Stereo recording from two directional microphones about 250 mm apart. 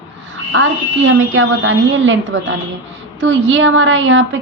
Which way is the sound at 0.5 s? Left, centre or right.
Right.